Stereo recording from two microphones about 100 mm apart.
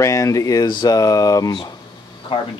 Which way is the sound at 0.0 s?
35° left (ahead or behind).